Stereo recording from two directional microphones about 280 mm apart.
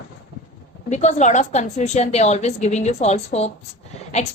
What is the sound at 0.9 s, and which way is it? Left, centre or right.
A woman's voice, left.